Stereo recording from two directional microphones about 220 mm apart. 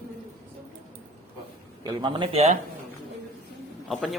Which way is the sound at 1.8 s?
20° right (ahead or behind).